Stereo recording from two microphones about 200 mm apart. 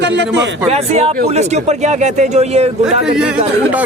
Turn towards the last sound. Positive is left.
turn(degrees=-5)  # may be behind; listen again after turning